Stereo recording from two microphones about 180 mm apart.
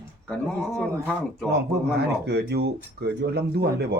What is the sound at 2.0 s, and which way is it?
Speech, 65° right (ahead or behind).